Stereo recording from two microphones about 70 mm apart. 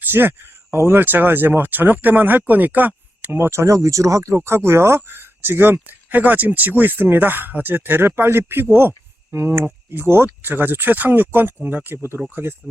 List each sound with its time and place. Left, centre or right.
0.0 s speech: right